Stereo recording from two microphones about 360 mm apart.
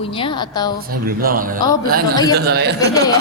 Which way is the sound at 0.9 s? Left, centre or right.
Right.